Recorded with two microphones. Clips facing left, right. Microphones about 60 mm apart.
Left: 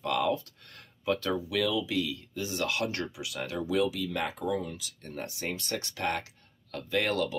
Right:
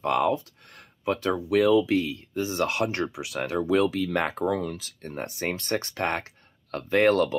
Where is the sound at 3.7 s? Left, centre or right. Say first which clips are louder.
Right 5 dB; right.